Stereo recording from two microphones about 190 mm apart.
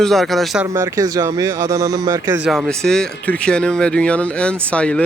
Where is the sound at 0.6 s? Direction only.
15° right (ahead or behind).